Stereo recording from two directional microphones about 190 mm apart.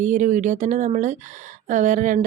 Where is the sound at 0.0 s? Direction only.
40° right (ahead or behind).